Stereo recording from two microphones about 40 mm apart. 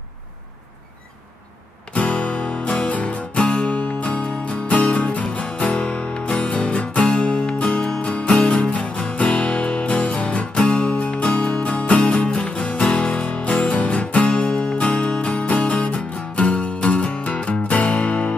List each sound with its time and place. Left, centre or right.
2.0 s music: left